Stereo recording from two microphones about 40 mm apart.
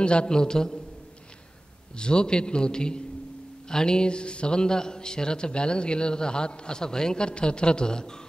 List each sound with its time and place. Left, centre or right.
0.0 s a man's voice: left
2.0 s speech: left